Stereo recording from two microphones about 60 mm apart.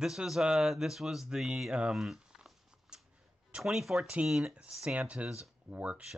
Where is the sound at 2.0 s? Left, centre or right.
Centre.